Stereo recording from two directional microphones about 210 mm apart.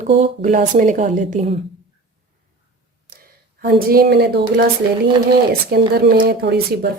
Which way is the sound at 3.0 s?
45° right (ahead or behind).